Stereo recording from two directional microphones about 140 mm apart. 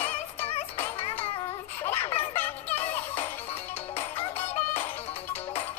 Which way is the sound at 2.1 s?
45° left (ahead or behind).